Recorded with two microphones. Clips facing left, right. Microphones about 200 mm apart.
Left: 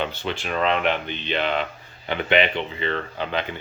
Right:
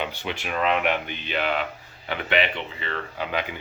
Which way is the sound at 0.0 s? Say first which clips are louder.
Left 3 dB; 10° right (ahead or behind).